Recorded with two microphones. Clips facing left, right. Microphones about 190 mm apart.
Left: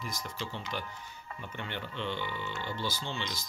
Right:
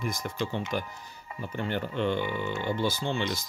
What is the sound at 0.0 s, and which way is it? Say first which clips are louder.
Speech: right 8 dB; 55° right (ahead or behind).